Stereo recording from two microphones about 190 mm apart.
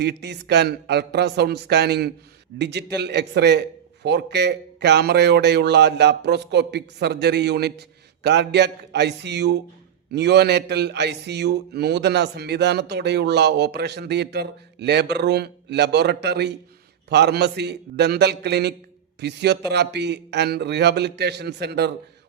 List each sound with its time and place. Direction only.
0.0 s a man's voice: 65° right (ahead or behind)